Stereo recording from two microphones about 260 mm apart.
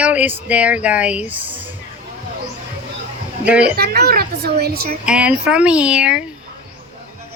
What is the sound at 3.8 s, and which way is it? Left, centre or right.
A child's voice, right.